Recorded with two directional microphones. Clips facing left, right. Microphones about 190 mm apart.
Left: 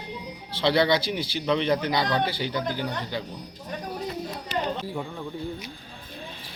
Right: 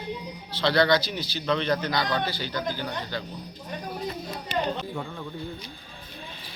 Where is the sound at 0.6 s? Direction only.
20° left (ahead or behind).